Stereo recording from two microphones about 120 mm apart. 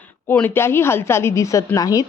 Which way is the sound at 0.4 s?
20° left (ahead or behind).